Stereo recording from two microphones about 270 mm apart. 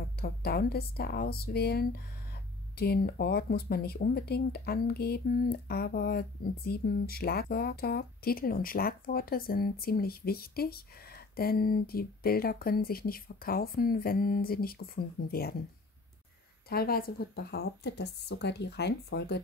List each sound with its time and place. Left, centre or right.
0.2 s speech: left
16.6 s speech: left